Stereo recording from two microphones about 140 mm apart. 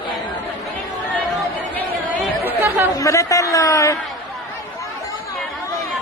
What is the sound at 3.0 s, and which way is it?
A man's voice, 25° left (ahead or behind).